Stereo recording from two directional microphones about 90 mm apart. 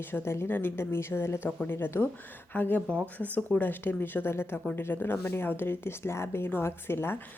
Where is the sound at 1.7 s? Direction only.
25° left (ahead or behind).